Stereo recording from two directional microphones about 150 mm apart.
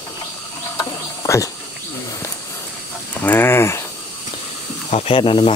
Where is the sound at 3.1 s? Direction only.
10° left (ahead or behind).